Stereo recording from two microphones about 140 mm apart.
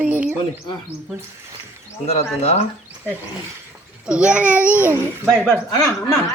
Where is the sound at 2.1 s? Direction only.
50° left (ahead or behind).